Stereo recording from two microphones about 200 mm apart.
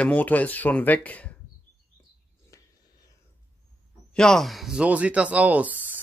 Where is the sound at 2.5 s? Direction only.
15° left (ahead or behind).